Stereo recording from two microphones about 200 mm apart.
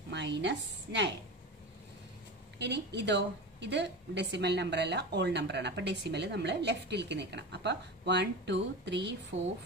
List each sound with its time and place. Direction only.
0.1 s a woman's voice: 60° right (ahead or behind)
2.6 s a woman's voice: 60° right (ahead or behind)